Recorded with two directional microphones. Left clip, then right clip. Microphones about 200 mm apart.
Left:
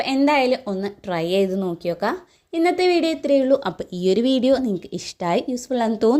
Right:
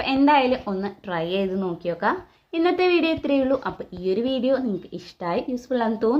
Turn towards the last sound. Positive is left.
turn(degrees=45)  # may be behind; listen again after turning